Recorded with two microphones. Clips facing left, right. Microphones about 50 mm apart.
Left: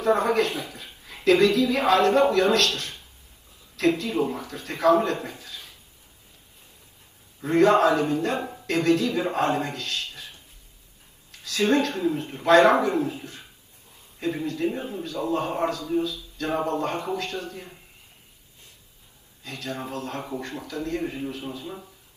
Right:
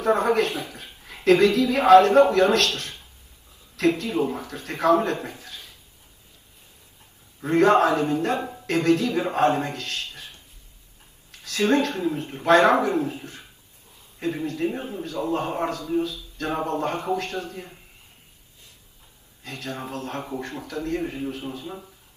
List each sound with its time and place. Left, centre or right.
0.0 s a man's voice: right
7.4 s a man's voice: right
19.4 s speech: right